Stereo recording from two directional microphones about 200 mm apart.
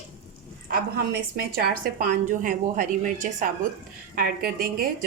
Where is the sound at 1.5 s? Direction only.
50° right (ahead or behind).